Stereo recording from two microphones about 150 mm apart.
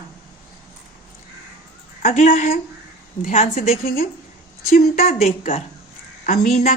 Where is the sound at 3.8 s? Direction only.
75° left (ahead or behind).